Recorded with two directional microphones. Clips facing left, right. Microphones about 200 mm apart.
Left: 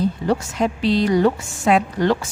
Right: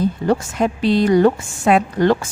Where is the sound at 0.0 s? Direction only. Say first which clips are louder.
Right 2 dB; 50° right (ahead or behind).